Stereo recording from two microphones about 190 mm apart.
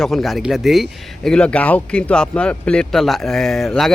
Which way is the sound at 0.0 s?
Centre (ahead or behind).